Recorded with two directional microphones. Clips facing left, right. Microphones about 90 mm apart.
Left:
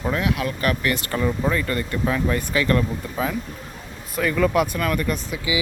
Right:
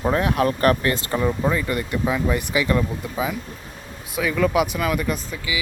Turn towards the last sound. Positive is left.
turn(degrees=20)  # may be behind; listen again after turning